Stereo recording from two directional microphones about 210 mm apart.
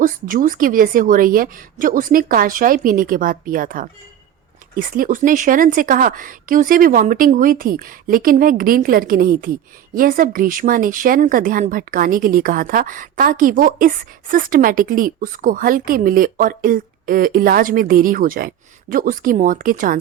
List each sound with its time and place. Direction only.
0.0 s speech: 40° right (ahead or behind)